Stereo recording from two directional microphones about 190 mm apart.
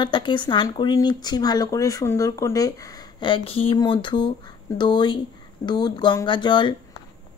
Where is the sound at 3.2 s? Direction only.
30° left (ahead or behind).